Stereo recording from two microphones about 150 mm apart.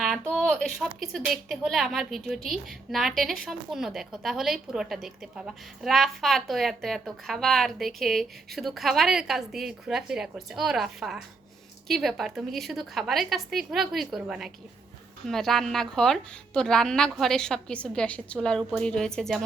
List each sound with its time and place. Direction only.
0.0 s speech: centre (ahead or behind)